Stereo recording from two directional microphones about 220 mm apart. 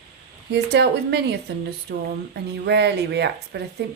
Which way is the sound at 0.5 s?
50° right (ahead or behind).